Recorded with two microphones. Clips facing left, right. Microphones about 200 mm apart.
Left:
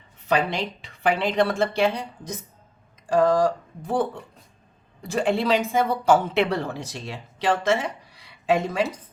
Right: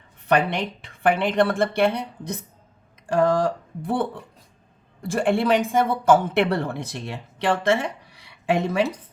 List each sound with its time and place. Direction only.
0.3 s a woman's voice: 60° right (ahead or behind)